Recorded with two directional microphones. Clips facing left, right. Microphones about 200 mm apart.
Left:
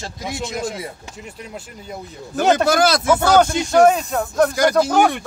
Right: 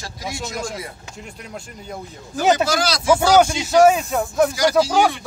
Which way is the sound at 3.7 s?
5° right (ahead or behind).